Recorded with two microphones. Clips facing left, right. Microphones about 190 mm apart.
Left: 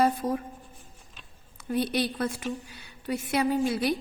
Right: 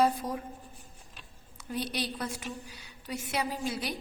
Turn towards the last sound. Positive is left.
turn(degrees=55)  # may be behind; listen again after turning